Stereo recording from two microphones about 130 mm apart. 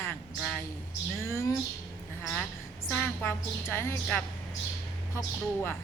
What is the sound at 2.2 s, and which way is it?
A woman's voice, 10° left (ahead or behind).